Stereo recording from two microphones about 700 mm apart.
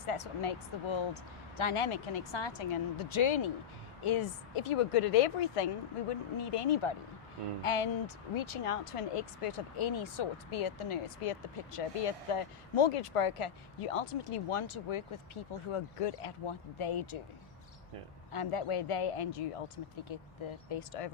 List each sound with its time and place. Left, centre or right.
0.0 s speech: left
18.3 s speech: left